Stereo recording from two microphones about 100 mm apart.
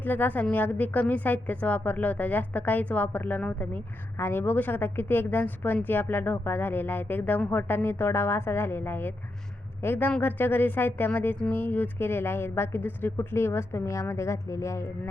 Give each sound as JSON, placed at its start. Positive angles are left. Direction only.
{"t": 0.0, "sound": "a woman's voice", "side_deg": 20}